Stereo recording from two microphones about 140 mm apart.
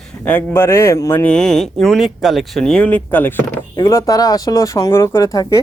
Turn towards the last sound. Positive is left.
turn(degrees=25)  # may be behind; listen again after turning